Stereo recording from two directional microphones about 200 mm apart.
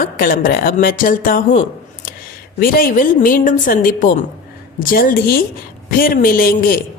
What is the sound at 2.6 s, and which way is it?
A woman's voice, 45° left (ahead or behind).